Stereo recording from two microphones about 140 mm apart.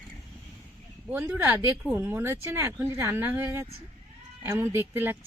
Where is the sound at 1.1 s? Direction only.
15° right (ahead or behind).